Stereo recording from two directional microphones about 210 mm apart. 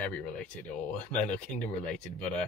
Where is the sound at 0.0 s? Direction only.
5° left (ahead or behind).